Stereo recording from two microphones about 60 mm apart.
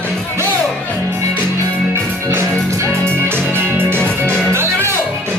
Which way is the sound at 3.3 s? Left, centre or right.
Right.